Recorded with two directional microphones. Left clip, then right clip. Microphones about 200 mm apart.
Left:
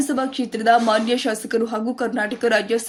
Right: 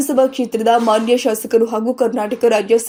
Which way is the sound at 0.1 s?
Centre (ahead or behind).